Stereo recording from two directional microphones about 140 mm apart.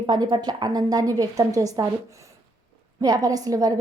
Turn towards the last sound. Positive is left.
turn(degrees=-25)  # may be behind; listen again after turning